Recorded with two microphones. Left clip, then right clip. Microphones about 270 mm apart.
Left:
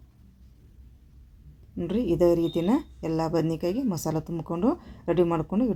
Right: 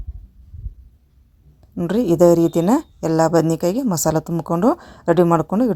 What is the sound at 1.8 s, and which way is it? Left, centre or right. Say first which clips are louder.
A woman's voice: right 9 dB; right.